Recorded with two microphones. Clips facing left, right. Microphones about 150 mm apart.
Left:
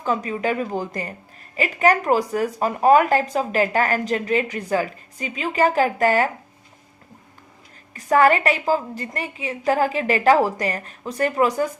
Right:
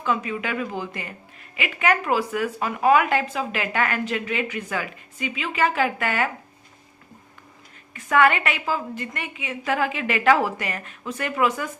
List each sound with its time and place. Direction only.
0.0 s speech: 40° left (ahead or behind)
7.9 s speech: 35° left (ahead or behind)